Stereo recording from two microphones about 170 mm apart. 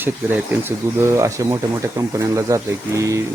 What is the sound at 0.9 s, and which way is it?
Speech, 15° right (ahead or behind).